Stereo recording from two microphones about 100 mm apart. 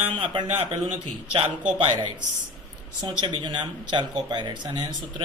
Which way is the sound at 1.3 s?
60° right (ahead or behind).